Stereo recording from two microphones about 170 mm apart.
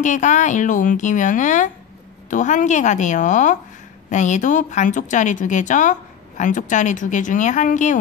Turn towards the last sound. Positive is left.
turn(degrees=45)  # may be behind; listen again after turning